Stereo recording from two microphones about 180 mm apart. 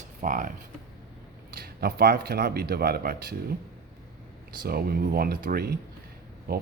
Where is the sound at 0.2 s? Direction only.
50° right (ahead or behind).